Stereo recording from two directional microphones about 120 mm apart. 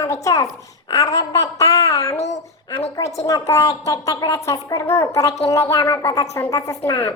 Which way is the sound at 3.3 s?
30° left (ahead or behind).